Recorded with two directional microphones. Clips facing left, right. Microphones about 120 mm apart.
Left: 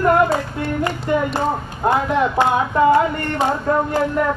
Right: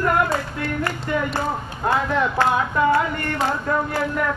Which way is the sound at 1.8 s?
20° left (ahead or behind).